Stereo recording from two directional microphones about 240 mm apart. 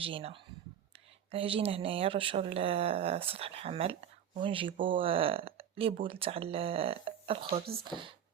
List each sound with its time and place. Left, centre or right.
0.0 s speech: right